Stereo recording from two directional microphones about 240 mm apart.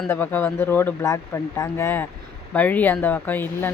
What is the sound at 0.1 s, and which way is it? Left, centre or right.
Speech, centre.